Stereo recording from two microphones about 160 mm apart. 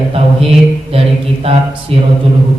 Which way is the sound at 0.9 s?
35° right (ahead or behind).